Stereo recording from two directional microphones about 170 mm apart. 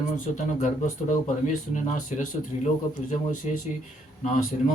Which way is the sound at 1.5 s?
50° left (ahead or behind).